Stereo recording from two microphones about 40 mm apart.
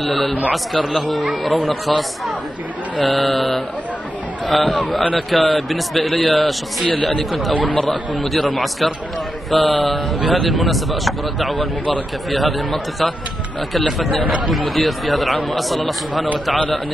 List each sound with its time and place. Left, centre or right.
0.0 s a man's voice: centre